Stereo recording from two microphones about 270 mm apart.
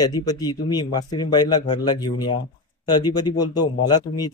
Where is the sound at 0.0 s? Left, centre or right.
Centre.